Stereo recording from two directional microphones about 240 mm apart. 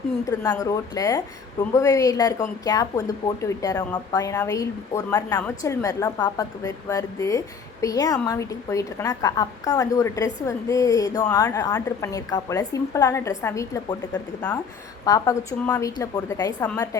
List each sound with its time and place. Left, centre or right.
0.3 s speech: centre
15.0 s speech: centre